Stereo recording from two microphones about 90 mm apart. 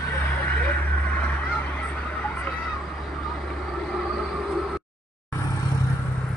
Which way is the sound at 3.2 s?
Centre (ahead or behind).